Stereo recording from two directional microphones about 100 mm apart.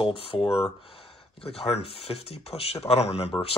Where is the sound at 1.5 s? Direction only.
85° left.